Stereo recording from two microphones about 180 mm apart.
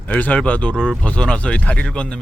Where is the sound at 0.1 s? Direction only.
10° left (ahead or behind).